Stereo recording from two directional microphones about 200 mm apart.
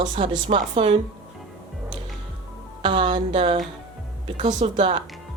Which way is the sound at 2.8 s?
25° right (ahead or behind).